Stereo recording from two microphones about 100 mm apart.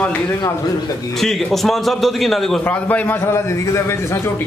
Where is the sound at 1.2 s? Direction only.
Centre (ahead or behind).